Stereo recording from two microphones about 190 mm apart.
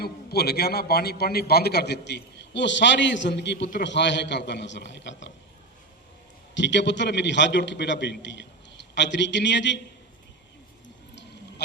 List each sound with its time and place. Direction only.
0.0 s a man's voice: 55° left (ahead or behind)
6.5 s a man's voice: 70° left (ahead or behind)
10.8 s a sound: 65° left (ahead or behind)